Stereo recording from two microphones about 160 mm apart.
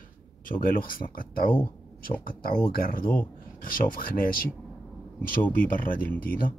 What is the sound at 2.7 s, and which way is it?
Speech, 60° left (ahead or behind).